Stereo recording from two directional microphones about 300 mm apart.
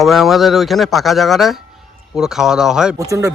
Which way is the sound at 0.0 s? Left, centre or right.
Centre.